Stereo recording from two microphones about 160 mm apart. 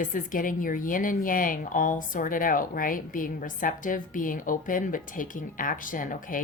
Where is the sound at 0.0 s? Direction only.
55° left (ahead or behind).